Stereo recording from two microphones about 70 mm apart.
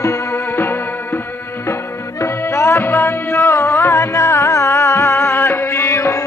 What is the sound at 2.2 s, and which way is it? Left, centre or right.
Music, left.